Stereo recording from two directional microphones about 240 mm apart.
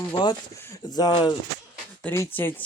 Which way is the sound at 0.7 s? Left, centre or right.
Centre.